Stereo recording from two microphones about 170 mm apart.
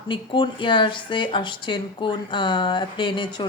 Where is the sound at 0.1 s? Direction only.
30° left (ahead or behind).